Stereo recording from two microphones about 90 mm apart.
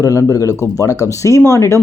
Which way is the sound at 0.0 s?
35° left (ahead or behind).